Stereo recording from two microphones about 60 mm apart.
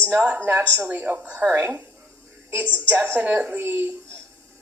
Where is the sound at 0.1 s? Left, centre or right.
Right.